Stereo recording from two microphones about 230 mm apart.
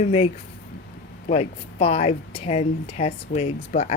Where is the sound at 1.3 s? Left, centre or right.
Left.